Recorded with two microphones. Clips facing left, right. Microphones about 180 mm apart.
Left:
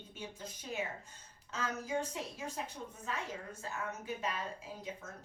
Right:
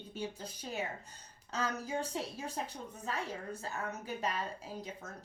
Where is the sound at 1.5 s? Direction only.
35° right (ahead or behind).